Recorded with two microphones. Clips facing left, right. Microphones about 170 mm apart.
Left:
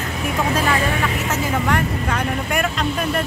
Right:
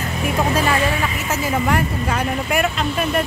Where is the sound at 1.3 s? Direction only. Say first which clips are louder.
Right 3 dB; 10° right (ahead or behind).